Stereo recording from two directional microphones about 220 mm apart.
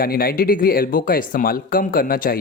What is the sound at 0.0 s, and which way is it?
Speech, 45° left (ahead or behind).